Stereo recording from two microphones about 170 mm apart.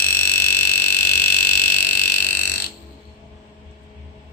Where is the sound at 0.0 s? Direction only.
15° left (ahead or behind).